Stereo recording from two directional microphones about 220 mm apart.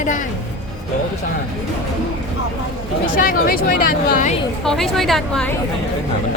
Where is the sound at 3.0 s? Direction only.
40° left (ahead or behind).